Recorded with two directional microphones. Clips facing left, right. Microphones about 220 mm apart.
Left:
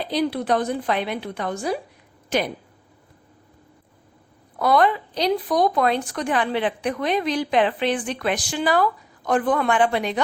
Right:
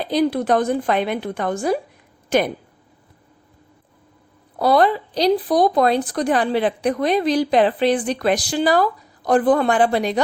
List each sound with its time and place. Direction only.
0.1 s a woman's voice: 45° right (ahead or behind)
4.5 s a woman's voice: 35° right (ahead or behind)